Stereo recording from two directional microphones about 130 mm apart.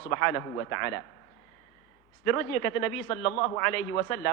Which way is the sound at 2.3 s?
20° left (ahead or behind).